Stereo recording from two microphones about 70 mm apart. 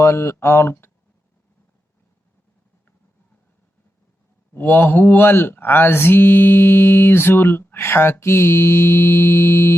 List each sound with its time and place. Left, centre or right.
0.0 s mantra: left
4.5 s mantra: left